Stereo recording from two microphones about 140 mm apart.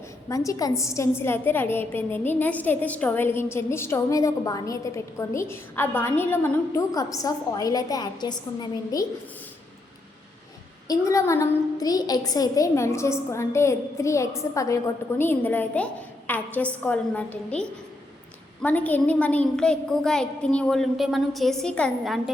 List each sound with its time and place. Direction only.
0.3 s a woman's voice: 25° left (ahead or behind)
10.8 s a woman's voice: 20° left (ahead or behind); by 22.2 s 5° left (ahead or behind)